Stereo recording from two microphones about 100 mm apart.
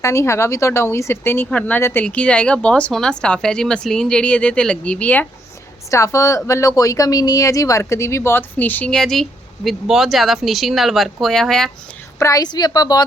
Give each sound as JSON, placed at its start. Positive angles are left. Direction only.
{"t": 0.0, "sound": "a woman's voice", "side_deg": 30}
{"t": 2.0, "sound": "speech", "side_deg": 10}
{"t": 5.9, "sound": "speech", "side_deg": 30}
{"t": 12.2, "sound": "speech", "side_deg": 40}